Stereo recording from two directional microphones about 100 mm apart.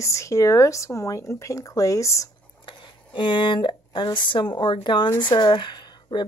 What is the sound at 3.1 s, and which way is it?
Speech, 55° left (ahead or behind).